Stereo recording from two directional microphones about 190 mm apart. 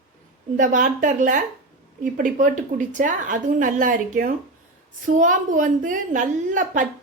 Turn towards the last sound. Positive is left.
turn(degrees=-40)  # may be behind; listen again after turning